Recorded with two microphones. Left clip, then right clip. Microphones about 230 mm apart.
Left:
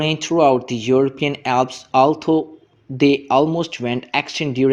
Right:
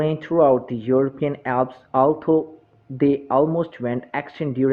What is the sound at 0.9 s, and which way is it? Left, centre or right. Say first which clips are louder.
Speech: left 3 dB; left.